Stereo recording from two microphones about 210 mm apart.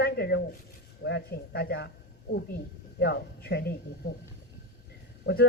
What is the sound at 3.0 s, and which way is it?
Speech, 50° left (ahead or behind).